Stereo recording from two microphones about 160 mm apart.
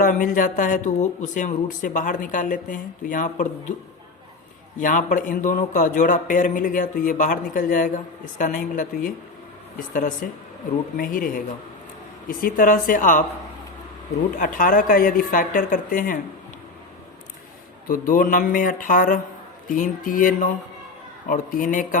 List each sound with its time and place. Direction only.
0.0 s speech: 55° left (ahead or behind)
4.8 s speech: 55° left (ahead or behind)
10.2 s speech: 65° left (ahead or behind)
14.3 s speech: 60° left (ahead or behind)
17.8 s speech: 60° left (ahead or behind)